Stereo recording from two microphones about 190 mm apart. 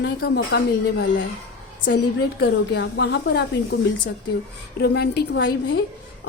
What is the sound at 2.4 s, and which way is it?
A woman's voice, 65° left (ahead or behind).